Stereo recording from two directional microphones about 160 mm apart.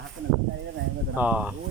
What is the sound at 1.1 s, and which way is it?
Speech, 10° right (ahead or behind).